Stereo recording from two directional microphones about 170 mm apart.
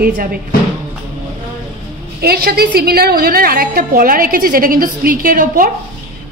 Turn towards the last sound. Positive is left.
turn(degrees=-55)  # may be behind; listen again after turning